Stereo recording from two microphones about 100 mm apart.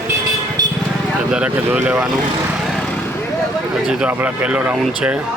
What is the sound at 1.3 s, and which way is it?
Speech, 10° right (ahead or behind).